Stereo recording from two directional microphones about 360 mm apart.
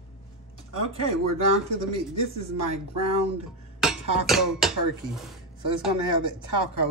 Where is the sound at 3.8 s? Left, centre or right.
Centre.